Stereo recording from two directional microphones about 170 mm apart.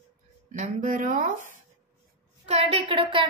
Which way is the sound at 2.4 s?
35° right (ahead or behind).